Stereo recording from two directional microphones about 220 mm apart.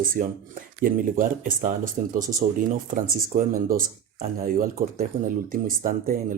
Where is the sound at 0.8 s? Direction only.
40° right (ahead or behind).